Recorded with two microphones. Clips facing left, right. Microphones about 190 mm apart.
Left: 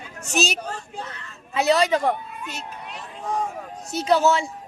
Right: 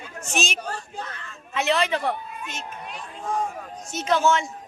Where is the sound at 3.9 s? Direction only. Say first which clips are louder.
Left 2 dB; 35° left (ahead or behind).